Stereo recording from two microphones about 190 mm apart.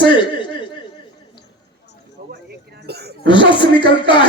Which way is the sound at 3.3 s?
25° left (ahead or behind).